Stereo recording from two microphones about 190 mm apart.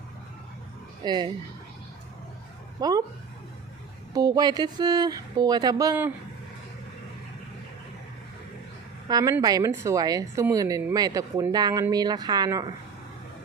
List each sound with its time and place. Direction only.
1.0 s a woman's voice: 25° right (ahead or behind)
2.8 s a woman's voice: 20° right (ahead or behind)
4.1 s a woman's voice: 20° right (ahead or behind)
9.0 s a woman's voice: 20° right (ahead or behind)